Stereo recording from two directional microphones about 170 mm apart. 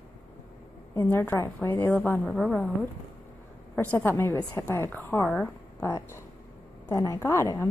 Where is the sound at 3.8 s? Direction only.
10° left (ahead or behind).